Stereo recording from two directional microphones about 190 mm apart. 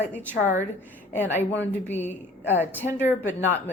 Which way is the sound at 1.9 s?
10° left (ahead or behind).